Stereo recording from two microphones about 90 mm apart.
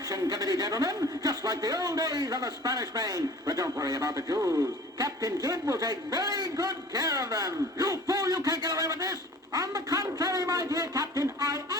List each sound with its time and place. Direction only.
0.1 s speech: 45° right (ahead or behind)